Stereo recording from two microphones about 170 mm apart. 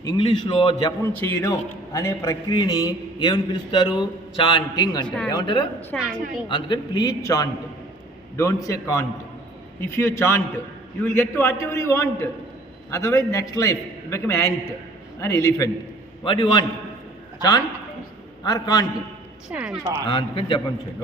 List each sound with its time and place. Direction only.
0.0 s a man's voice: 20° left (ahead or behind)
1.0 s a man's voice: 15° left (ahead or behind)
5.9 s a man's voice: 10° left (ahead or behind)
6.5 s a man's voice: 25° left (ahead or behind)
16.2 s a man's voice: 30° left (ahead or behind)
18.4 s a man's voice: 25° left (ahead or behind)
19.5 s speech: 5° right (ahead or behind)
20.1 s a man's voice: 30° left (ahead or behind)